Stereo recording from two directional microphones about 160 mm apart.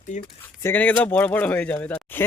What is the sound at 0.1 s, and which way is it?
Speech, 45° left (ahead or behind).